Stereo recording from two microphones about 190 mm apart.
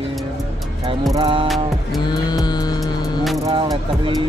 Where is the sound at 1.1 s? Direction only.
30° right (ahead or behind).